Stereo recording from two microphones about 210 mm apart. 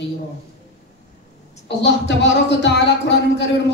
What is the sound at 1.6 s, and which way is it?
Speech, 55° left (ahead or behind).